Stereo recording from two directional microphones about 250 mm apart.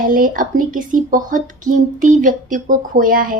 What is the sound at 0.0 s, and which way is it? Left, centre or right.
A woman's voice, right.